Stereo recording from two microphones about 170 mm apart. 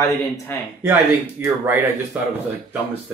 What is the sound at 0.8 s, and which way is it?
Speech, 15° right (ahead or behind).